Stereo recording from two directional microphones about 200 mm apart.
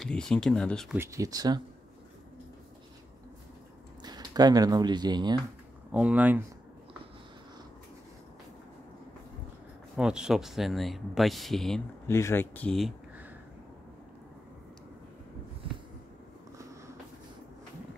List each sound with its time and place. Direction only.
0.0 s speech: 5° left (ahead or behind)
0.9 s speech: 15° right (ahead or behind)
4.0 s speech: 20° right (ahead or behind)
5.9 s speech: 5° right (ahead or behind)
9.9 s speech: 5° right (ahead or behind)
12.1 s speech: 15° left (ahead or behind)